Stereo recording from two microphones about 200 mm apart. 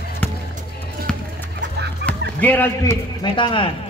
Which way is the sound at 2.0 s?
5° left (ahead or behind).